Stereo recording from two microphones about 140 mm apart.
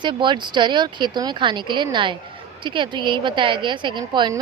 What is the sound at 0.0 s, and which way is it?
A woman's voice, 35° right (ahead or behind).